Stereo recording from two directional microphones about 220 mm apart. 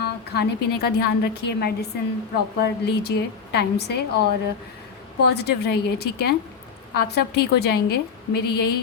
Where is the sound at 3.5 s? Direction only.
50° left (ahead or behind).